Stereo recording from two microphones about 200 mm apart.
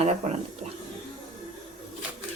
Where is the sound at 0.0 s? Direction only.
30° right (ahead or behind).